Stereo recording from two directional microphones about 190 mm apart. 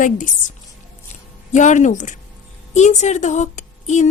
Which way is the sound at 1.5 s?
40° left (ahead or behind).